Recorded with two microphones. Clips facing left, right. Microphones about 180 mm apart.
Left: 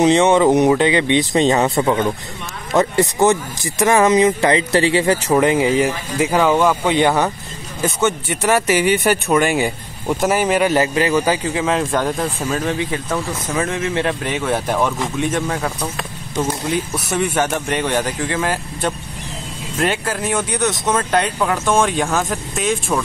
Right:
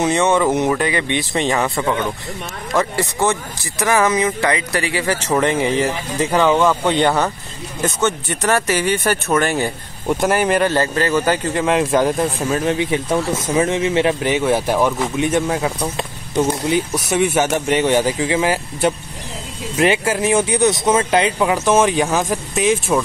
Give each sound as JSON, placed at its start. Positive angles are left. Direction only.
{"t": 0.0, "sound": "speech", "side_deg": 20}
{"t": 5.3, "sound": "speech", "side_deg": 10}
{"t": 10.7, "sound": "speech", "side_deg": 15}
{"t": 14.5, "sound": "speech", "side_deg": -5}
{"t": 16.9, "sound": "speech", "side_deg": -5}
{"t": 20.2, "sound": "speech", "side_deg": -25}
{"t": 20.8, "sound": "speech", "side_deg": -10}